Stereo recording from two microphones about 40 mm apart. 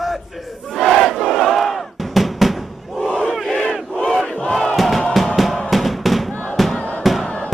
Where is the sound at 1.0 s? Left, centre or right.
Centre.